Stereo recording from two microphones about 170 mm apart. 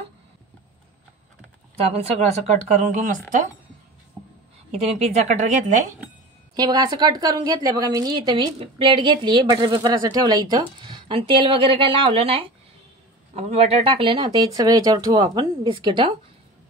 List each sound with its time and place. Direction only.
1.8 s speech: 35° right (ahead or behind)
4.8 s speech: 40° right (ahead or behind)
6.5 s a woman's voice: 25° right (ahead or behind)